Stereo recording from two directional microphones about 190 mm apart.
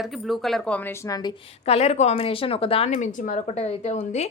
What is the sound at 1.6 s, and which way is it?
Speech, 35° left (ahead or behind).